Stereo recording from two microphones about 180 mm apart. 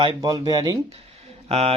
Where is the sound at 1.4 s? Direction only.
35° right (ahead or behind).